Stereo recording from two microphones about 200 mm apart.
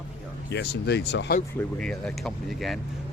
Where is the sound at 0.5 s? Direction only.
55° left (ahead or behind).